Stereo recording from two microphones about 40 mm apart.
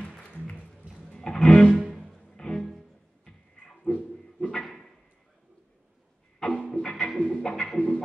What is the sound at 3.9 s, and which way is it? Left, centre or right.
Dog, centre.